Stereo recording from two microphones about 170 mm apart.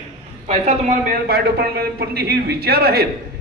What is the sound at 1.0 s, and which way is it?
A man's voice, 65° right (ahead or behind).